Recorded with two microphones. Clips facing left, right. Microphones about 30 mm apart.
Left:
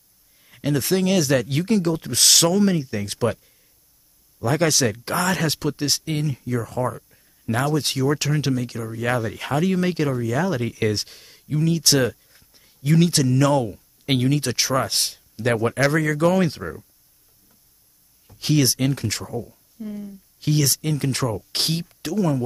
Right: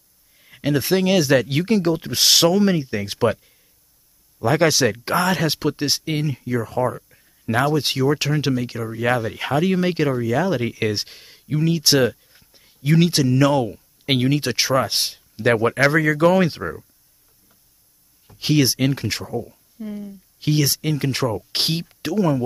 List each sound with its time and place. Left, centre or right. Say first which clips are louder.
0.4 s speech: right 2 dB; centre
18.2 s speech: right 2 dB; centre